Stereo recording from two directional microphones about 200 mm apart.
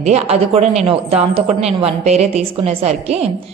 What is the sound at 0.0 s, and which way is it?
A woman's voice, 30° right (ahead or behind).